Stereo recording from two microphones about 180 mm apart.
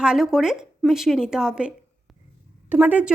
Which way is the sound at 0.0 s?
5° right (ahead or behind).